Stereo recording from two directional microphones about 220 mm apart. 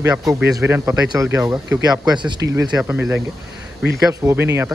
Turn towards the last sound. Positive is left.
turn(degrees=-15)  # may be behind; listen again after turning